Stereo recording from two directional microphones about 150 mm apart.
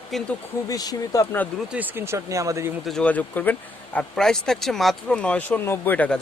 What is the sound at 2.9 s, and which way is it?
Speech, 5° left (ahead or behind).